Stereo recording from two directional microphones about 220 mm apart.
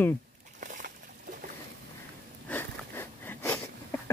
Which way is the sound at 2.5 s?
10° left (ahead or behind).